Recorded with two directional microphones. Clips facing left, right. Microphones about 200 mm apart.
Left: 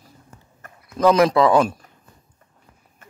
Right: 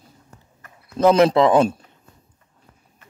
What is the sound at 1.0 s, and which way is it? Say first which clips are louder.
Speech: right 1 dB; 30° right (ahead or behind).